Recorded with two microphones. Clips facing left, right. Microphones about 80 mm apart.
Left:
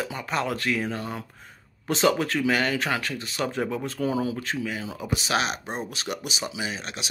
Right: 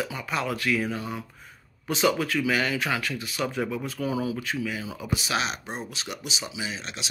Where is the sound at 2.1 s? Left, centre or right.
Left.